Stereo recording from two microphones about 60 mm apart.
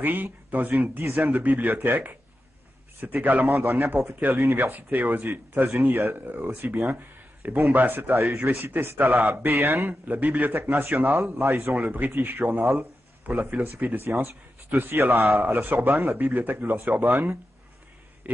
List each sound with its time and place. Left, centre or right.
0.0 s a man's voice: right
9.8 s a man's voice: right
11.4 s a man's voice: right
11.7 s a man's voice: right
14.0 s a man's voice: right
18.3 s a sound: right